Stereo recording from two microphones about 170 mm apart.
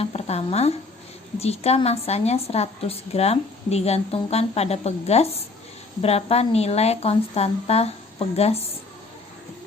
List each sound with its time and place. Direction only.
0.0 s speech: 35° left (ahead or behind)